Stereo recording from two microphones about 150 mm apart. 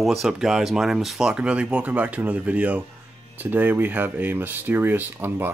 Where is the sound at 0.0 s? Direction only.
Centre (ahead or behind).